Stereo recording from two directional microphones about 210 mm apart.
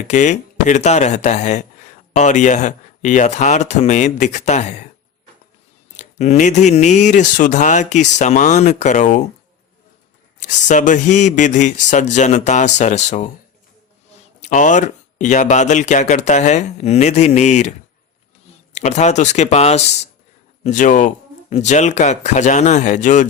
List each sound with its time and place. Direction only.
0.1 s speech: 35° left (ahead or behind)
6.0 s speech: 35° left (ahead or behind)
10.4 s speech: 35° left (ahead or behind)
14.4 s speech: 35° left (ahead or behind)